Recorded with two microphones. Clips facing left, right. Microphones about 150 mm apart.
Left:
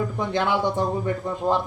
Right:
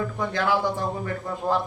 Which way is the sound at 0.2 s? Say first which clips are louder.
Left 1 dB; 20° left (ahead or behind).